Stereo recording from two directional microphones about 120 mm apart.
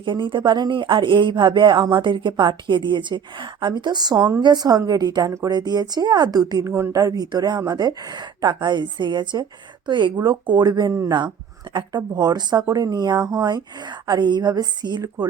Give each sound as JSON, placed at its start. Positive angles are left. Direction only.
{"t": 0.0, "sound": "speech", "side_deg": -40}